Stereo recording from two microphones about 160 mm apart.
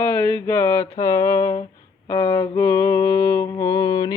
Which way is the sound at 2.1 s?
30° left (ahead or behind).